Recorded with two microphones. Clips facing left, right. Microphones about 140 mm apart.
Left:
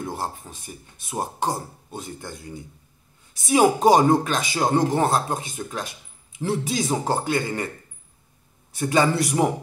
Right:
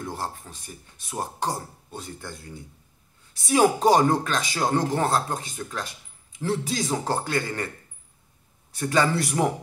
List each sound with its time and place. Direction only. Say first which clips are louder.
0.0 s speech: left 3 dB; 15° left (ahead or behind)
8.7 s a man's voice: left 2 dB; 15° left (ahead or behind)